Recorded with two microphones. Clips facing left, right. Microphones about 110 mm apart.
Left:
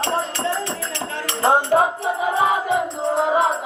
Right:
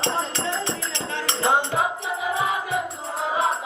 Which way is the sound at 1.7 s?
50° left (ahead or behind).